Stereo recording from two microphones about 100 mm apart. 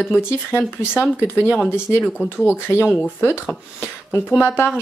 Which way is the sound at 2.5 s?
20° left (ahead or behind).